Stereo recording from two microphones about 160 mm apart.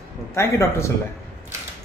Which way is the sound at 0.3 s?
20° left (ahead or behind).